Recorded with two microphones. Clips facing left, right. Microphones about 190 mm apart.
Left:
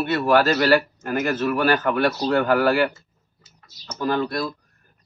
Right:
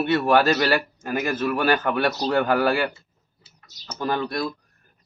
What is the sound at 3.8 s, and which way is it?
Bird, 10° right (ahead or behind).